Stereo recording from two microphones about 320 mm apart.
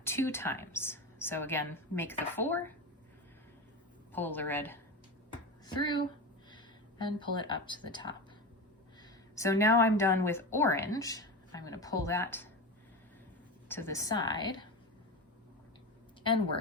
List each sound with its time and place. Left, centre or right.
0.0 s a woman's voice: centre
4.1 s a woman's voice: centre
13.7 s a woman's voice: centre